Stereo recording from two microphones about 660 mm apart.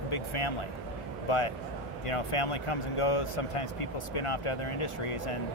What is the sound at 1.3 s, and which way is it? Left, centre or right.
Speech, left.